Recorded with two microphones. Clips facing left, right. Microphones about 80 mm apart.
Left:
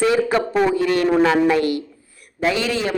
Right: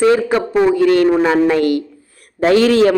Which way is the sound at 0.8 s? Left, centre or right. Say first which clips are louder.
Right 7 dB; right.